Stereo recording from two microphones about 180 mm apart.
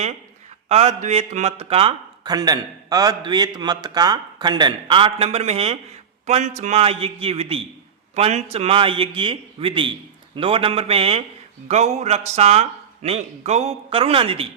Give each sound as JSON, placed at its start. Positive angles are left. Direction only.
{"t": 0.7, "sound": "a man's voice", "side_deg": -35}